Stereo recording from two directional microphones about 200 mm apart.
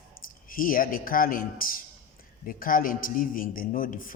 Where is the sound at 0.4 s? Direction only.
45° left (ahead or behind).